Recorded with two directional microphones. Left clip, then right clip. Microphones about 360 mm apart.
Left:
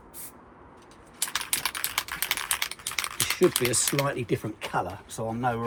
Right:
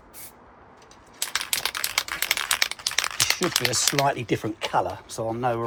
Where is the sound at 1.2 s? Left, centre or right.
Right.